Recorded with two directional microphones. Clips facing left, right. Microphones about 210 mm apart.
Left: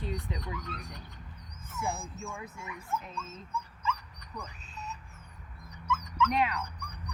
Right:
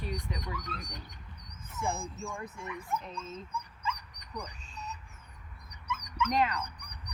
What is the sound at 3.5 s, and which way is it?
Dog, 15° right (ahead or behind).